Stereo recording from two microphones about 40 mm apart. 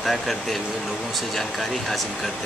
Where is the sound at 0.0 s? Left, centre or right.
Centre.